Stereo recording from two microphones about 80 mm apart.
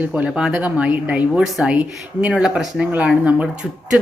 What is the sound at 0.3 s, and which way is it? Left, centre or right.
Speech, centre.